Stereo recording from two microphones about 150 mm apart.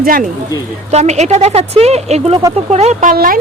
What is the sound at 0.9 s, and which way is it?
A woman's voice, 50° right (ahead or behind).